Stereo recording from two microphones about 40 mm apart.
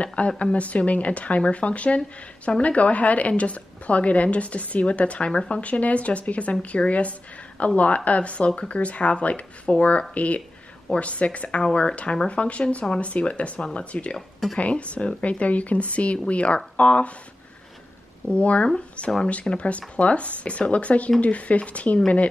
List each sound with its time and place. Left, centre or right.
0.0 s a woman's voice: left
18.3 s speech: left